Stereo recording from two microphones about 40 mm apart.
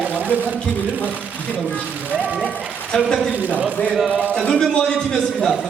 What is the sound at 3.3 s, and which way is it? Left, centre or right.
Speech, right.